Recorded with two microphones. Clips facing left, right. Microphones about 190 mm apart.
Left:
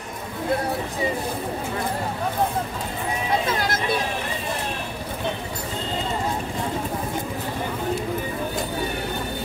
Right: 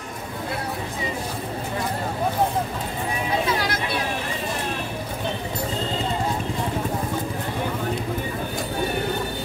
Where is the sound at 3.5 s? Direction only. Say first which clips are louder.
Even; 45° left (ahead or behind).